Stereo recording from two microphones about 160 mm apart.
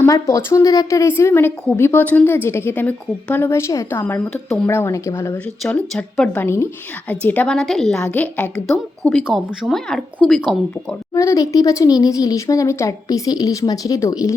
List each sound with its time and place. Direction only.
0.0 s a woman's voice: 20° left (ahead or behind)
4.0 s a woman's voice: 5° left (ahead or behind)
4.6 s a woman's voice: 15° left (ahead or behind); by 10.6 s centre (ahead or behind)
11.1 s speech: 20° left (ahead or behind)